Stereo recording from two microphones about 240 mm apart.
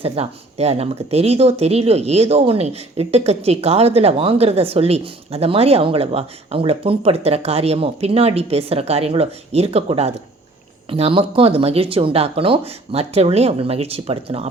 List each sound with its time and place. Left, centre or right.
0.0 s speech: right